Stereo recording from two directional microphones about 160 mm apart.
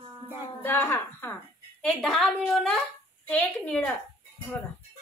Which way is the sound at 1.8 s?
5° left (ahead or behind).